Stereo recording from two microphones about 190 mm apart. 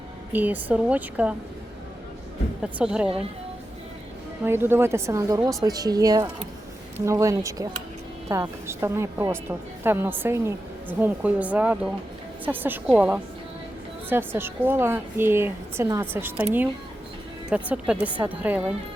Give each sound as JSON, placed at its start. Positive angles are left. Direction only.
{"t": 0.3, "sound": "a woman's voice", "side_deg": -10}
{"t": 2.6, "sound": "a woman's voice", "side_deg": -5}
{"t": 4.4, "sound": "a woman's voice", "side_deg": -10}